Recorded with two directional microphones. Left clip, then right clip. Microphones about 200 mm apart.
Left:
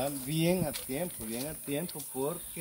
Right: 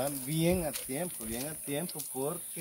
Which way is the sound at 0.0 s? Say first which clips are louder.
Even; 15° right (ahead or behind).